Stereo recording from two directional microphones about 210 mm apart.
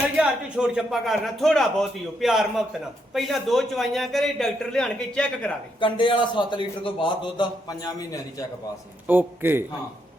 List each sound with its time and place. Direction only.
0.2 s a man's voice: 5° right (ahead or behind)
5.8 s a man's voice: 20° left (ahead or behind)
9.0 s a man's voice: 10° right (ahead or behind)